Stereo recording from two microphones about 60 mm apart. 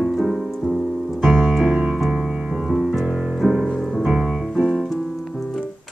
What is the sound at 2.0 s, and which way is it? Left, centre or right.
Music, centre.